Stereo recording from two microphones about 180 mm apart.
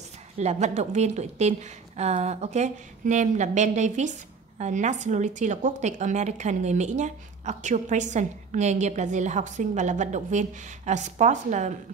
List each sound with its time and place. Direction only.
0.4 s a woman's voice: 40° right (ahead or behind)